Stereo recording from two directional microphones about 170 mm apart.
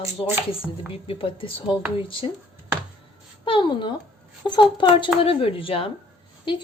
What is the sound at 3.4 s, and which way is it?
Speech, 30° left (ahead or behind).